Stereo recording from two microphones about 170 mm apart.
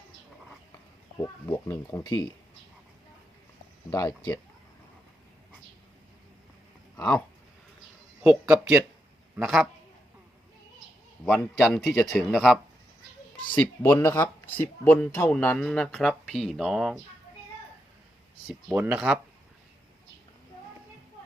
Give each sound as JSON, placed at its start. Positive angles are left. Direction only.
{"t": 1.2, "sound": "speech", "side_deg": 20}
{"t": 3.8, "sound": "speech", "side_deg": 15}
{"t": 6.9, "sound": "speech", "side_deg": 5}
{"t": 8.2, "sound": "speech", "side_deg": -5}
{"t": 11.3, "sound": "speech", "side_deg": 5}
{"t": 13.6, "sound": "speech", "side_deg": 15}
{"t": 18.4, "sound": "speech", "side_deg": -10}